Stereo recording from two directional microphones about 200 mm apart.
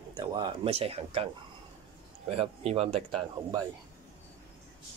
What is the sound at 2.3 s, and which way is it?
Speech, 30° right (ahead or behind).